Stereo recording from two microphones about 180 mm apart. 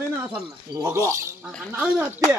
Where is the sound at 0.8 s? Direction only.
15° right (ahead or behind).